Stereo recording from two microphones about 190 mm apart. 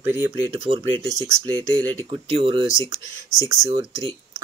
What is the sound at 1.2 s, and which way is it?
Speech, 15° right (ahead or behind).